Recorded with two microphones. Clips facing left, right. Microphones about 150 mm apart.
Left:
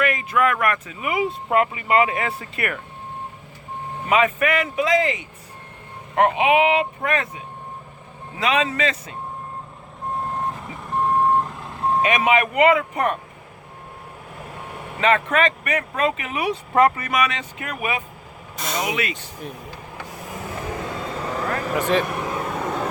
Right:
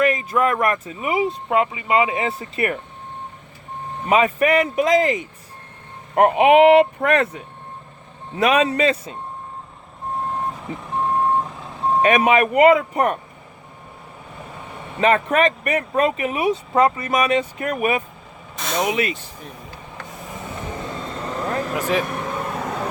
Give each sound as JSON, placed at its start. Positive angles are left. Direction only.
{"t": 0.0, "sound": "speech", "side_deg": -35}
{"t": 1.5, "sound": "speech", "side_deg": -20}
{"t": 4.0, "sound": "speech", "side_deg": -35}
{"t": 8.4, "sound": "a man's voice", "side_deg": -50}
{"t": 10.9, "sound": "reversing beeps", "side_deg": 0}
{"t": 12.0, "sound": "speech", "side_deg": -40}
{"t": 14.3, "sound": "vehicle", "side_deg": 5}
{"t": 15.0, "sound": "speech", "side_deg": -40}
{"t": 16.7, "sound": "speech", "side_deg": -20}
{"t": 17.3, "sound": "a man's voice", "side_deg": -40}
{"t": 18.5, "sound": "vehicle", "side_deg": 0}
{"t": 19.1, "sound": "speech", "side_deg": 0}
{"t": 20.0, "sound": "vehicle", "side_deg": 5}